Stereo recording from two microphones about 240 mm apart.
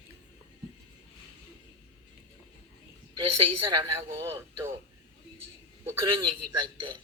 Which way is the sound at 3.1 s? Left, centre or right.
Right.